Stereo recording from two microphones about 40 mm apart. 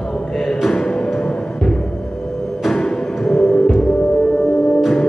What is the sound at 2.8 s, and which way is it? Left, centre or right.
Music, centre.